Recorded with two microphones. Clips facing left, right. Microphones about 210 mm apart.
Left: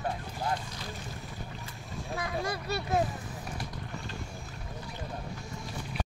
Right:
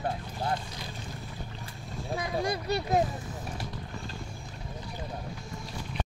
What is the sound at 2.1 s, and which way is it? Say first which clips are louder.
Speech: right 3 dB; 15° right (ahead or behind).